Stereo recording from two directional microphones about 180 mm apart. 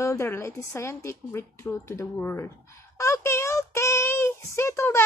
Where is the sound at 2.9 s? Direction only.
15° left (ahead or behind).